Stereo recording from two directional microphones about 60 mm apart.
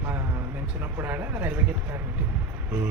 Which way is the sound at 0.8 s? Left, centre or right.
Right.